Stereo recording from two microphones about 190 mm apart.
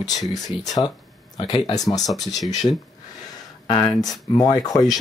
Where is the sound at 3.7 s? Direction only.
20° left (ahead or behind).